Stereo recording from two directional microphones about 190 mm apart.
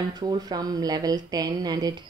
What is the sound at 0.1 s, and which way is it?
Speech, 20° right (ahead or behind).